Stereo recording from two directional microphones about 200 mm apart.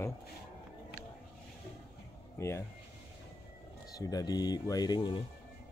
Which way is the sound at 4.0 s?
20° left (ahead or behind).